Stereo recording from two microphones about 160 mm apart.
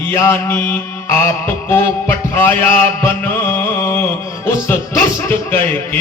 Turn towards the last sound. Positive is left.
turn(degrees=15)  # may be behind; listen again after turning